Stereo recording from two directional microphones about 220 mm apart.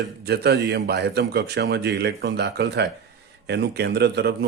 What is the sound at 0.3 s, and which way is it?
Speech, 50° right (ahead or behind).